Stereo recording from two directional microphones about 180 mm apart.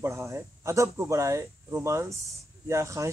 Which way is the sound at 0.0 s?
15° right (ahead or behind).